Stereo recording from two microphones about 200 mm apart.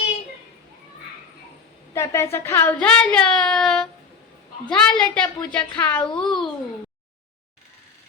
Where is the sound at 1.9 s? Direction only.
15° left (ahead or behind).